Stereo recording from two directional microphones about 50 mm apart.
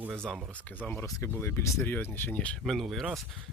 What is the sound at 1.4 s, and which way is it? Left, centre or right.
Speech, left.